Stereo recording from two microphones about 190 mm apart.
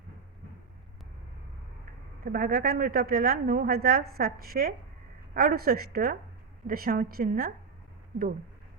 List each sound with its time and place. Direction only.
2.2 s a woman's voice: 50° right (ahead or behind)